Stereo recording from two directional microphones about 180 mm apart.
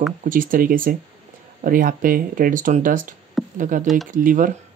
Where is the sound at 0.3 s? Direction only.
50° right (ahead or behind).